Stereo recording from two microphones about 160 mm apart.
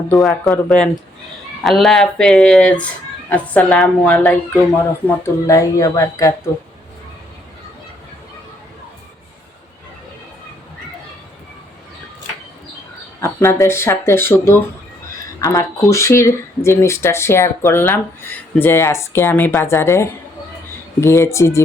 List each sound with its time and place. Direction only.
0.2 s speech: centre (ahead or behind); by 6.3 s 20° left (ahead or behind)
13.2 s speech: 15° left (ahead or behind)